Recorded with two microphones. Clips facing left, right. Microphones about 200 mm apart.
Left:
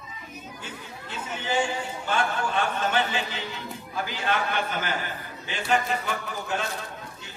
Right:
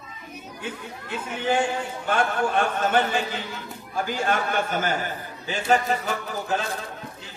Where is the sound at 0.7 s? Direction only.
55° right (ahead or behind); by 6.6 s 40° right (ahead or behind).